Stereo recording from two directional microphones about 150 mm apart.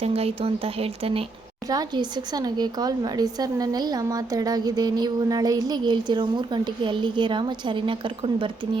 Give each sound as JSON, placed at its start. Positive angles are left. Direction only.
{"t": 0.0, "sound": "speech", "side_deg": -40}
{"t": 1.7, "sound": "a woman's voice", "side_deg": -25}